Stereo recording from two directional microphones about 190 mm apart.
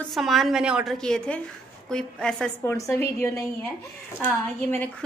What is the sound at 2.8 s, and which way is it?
A woman's voice, 15° left (ahead or behind).